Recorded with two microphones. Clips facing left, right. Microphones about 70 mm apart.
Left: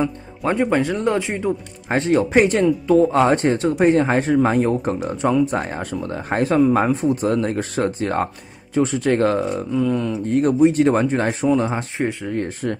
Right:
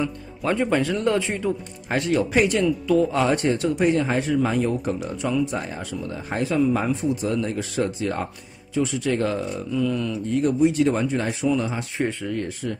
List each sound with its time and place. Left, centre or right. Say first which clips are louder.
0.5 s speech: left 3 dB; left
12.0 s speech: even; centre
12.6 s speech: left 5 dB; left